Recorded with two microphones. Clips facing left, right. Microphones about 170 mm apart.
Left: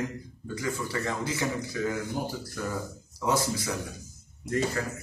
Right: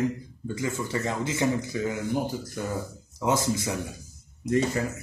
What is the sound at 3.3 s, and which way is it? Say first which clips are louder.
Speech: right 2 dB; 20° right (ahead or behind).